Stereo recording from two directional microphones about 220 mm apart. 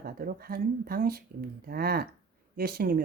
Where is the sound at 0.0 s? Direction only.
40° right (ahead or behind).